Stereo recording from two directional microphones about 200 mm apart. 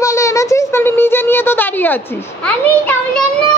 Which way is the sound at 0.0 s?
15° left (ahead or behind).